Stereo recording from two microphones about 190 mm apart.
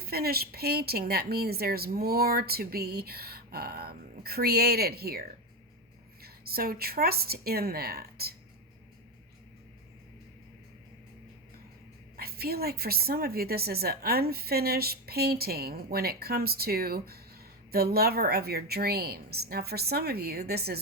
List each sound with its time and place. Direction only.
0.0 s a woman's voice: 55° right (ahead or behind)
6.2 s a woman's voice: 55° right (ahead or behind)
12.1 s a woman's voice: 55° right (ahead or behind)